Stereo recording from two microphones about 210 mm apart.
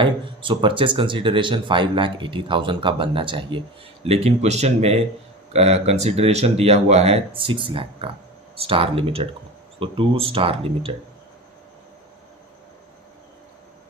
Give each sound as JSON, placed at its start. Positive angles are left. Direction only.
{"t": 0.0, "sound": "speech", "side_deg": -25}